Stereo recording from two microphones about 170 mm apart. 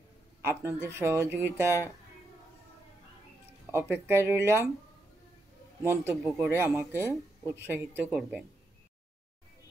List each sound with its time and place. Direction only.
0.4 s speech: 15° right (ahead or behind)
3.7 s speech: 15° right (ahead or behind)
5.8 s speech: 15° right (ahead or behind)